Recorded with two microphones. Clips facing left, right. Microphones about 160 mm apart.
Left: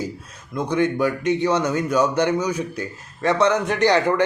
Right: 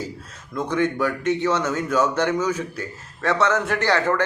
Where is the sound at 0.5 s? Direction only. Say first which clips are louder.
Left 2 dB; 15° left (ahead or behind).